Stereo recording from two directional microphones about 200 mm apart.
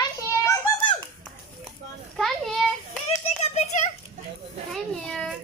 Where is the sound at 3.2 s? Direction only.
35° left (ahead or behind).